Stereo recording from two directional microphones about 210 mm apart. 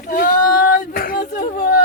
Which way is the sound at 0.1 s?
40° left (ahead or behind).